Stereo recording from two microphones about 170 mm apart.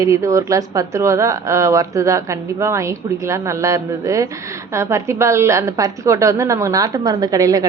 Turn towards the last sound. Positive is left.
turn(degrees=-20)  # may be behind; listen again after turning